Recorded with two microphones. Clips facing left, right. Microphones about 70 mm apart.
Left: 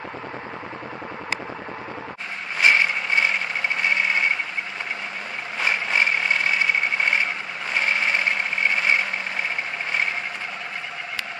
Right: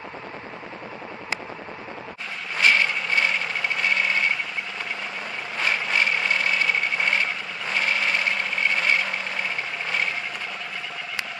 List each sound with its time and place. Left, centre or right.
2.6 s vehicle: centre
5.6 s vehicle: centre